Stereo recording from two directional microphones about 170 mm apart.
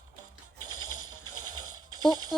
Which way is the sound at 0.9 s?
25° right (ahead or behind).